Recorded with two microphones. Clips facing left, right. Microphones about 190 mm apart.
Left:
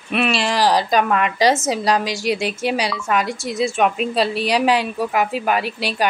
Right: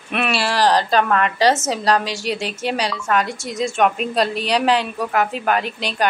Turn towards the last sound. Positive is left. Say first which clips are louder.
# left 1 dB
turn(degrees=10)  # may be behind; listen again after turning